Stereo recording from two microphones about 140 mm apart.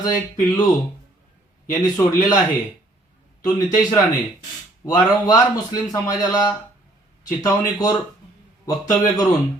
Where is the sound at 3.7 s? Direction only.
30° left (ahead or behind).